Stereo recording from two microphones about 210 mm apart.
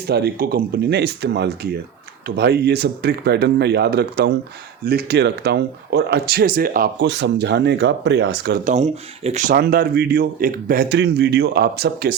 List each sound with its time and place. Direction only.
0.1 s speech: 50° right (ahead or behind)
8.6 s speech: 30° right (ahead or behind); by 12.1 s 50° right (ahead or behind)